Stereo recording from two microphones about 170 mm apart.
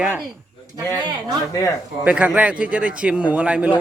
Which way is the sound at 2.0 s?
10° right (ahead or behind).